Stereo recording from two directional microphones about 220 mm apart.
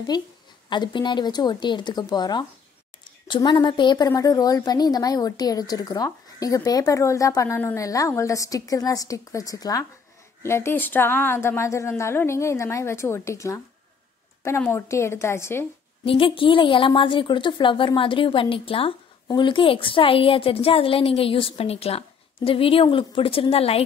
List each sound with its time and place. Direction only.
0.1 s a woman's voice: 20° left (ahead or behind)
16.1 s a woman's voice: 25° left (ahead or behind)